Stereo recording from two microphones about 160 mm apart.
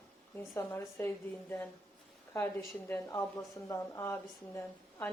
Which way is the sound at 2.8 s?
20° left (ahead or behind).